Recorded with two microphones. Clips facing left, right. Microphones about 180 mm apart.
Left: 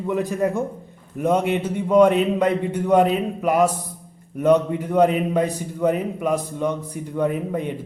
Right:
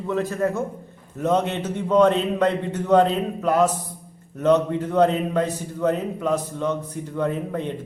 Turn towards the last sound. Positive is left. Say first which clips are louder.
# left 2 dB
turn(degrees=10)  # may be behind; listen again after turning